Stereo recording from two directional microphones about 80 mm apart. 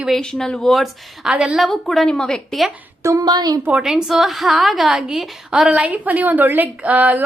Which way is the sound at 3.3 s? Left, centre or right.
Right.